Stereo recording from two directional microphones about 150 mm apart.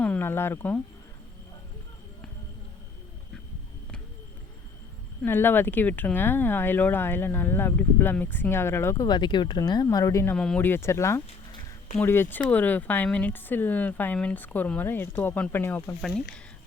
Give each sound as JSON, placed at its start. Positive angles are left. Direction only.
{"t": 0.0, "sound": "speech", "side_deg": 10}
{"t": 5.2, "sound": "speech", "side_deg": 15}
{"t": 10.3, "sound": "speech", "side_deg": 5}